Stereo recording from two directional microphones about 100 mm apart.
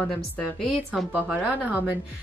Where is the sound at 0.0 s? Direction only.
5° left (ahead or behind).